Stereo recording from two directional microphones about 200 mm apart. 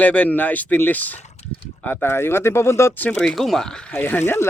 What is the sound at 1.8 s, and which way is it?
Speech, 10° left (ahead or behind).